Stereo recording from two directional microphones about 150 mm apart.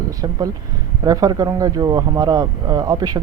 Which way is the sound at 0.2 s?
25° right (ahead or behind).